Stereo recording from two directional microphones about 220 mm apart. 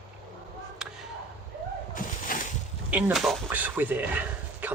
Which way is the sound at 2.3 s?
40° left (ahead or behind).